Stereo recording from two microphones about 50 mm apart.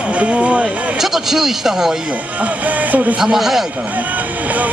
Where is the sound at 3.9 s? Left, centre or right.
Right.